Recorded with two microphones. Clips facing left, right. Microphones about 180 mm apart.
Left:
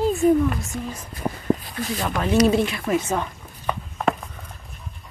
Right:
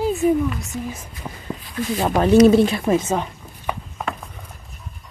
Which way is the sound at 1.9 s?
35° right (ahead or behind).